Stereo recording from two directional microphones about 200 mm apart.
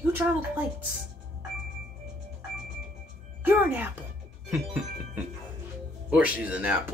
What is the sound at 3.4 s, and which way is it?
Music, 10° right (ahead or behind).